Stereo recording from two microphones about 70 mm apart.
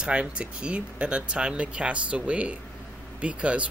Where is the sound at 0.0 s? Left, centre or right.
Centre.